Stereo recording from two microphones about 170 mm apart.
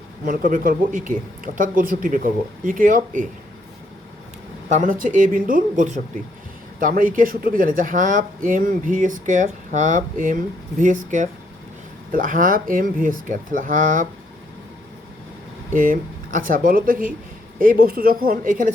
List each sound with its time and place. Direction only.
0.3 s speech: 55° right (ahead or behind)
4.7 s speech: 50° right (ahead or behind)
15.7 s speech: 55° right (ahead or behind)